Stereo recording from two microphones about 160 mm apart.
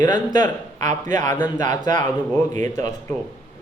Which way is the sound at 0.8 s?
50° right (ahead or behind).